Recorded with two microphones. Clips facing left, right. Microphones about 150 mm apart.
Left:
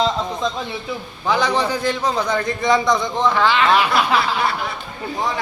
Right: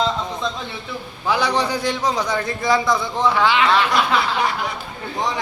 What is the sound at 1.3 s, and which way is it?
A man's voice, 10° right (ahead or behind).